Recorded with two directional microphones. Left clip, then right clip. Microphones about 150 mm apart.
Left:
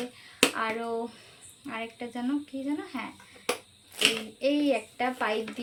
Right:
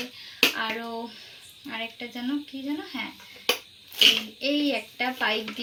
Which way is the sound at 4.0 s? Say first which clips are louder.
Right 6 dB; 20° left (ahead or behind).